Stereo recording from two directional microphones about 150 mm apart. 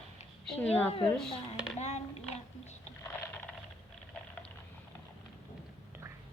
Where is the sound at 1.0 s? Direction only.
5° left (ahead or behind).